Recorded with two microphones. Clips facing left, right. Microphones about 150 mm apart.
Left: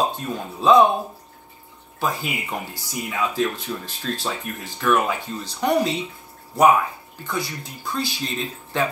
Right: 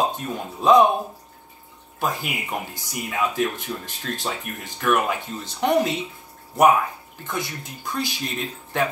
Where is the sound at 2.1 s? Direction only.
15° right (ahead or behind).